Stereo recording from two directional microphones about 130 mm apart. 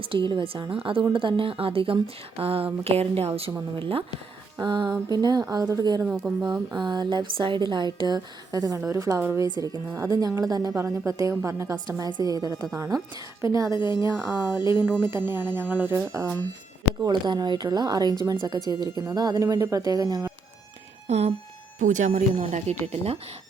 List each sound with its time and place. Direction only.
0.0 s a woman's voice: 40° right (ahead or behind)
6.0 s speech: 10° right (ahead or behind)
6.7 s a woman's voice: 35° right (ahead or behind)
13.7 s a woman's voice: 35° left (ahead or behind)
14.7 s speech: 15° right (ahead or behind)
17.0 s a woman's voice: 35° right (ahead or behind)
21.1 s a woman's voice: 55° right (ahead or behind)
21.8 s speech: 70° right (ahead or behind)